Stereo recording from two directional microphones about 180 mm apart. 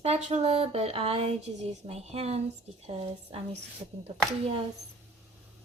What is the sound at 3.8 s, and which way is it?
Speech, 25° right (ahead or behind).